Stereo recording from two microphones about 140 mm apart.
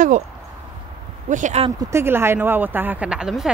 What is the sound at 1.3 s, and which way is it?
Speech, 65° right (ahead or behind).